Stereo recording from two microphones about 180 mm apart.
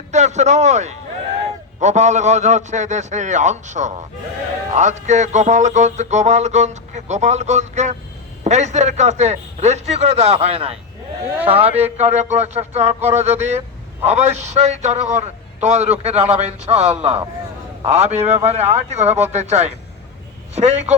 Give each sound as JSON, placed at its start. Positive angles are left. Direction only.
{"t": 0.1, "sound": "music", "side_deg": -40}